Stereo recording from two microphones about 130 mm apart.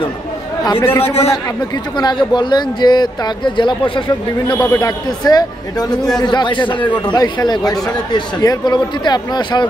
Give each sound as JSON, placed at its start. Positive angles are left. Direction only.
{"t": 0.7, "sound": "a man's voice", "side_deg": 15}
{"t": 2.0, "sound": "speech", "side_deg": 35}